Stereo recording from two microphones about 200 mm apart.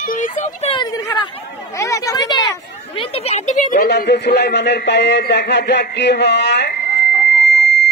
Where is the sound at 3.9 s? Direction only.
55° left (ahead or behind).